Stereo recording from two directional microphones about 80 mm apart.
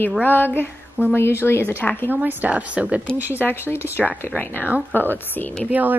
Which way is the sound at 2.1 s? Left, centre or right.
Right.